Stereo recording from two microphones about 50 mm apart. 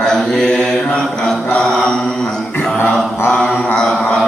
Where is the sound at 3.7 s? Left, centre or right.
Centre.